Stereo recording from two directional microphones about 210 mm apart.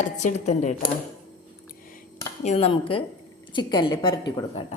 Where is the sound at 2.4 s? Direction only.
30° left (ahead or behind).